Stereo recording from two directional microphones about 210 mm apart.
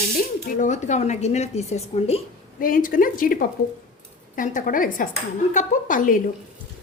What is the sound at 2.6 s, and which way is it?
A woman's voice, 40° left (ahead or behind).